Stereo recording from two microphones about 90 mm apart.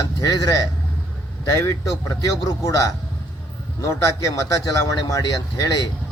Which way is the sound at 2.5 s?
40° left (ahead or behind).